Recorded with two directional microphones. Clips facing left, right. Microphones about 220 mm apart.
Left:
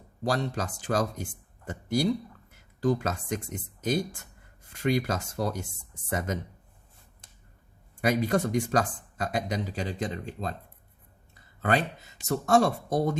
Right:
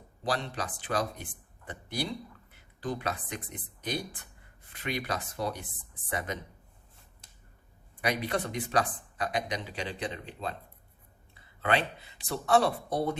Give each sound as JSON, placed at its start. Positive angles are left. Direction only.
{"t": 0.3, "sound": "speech", "side_deg": 45}
{"t": 8.0, "sound": "speech", "side_deg": 45}